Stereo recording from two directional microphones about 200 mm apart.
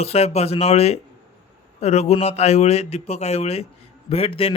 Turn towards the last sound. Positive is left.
turn(degrees=30)  # may be behind; listen again after turning